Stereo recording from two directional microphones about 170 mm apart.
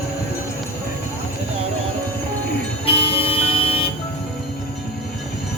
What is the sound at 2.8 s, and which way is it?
Vehicle, 35° left (ahead or behind).